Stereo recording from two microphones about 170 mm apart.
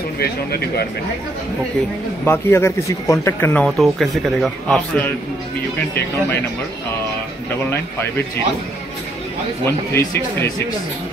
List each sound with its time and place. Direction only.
0.2 s speech: 65° left (ahead or behind)
2.2 s speech: 15° left (ahead or behind)
9.7 s speech: 15° left (ahead or behind)